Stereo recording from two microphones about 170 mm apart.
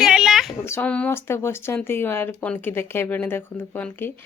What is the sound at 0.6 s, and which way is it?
Speech, 10° left (ahead or behind).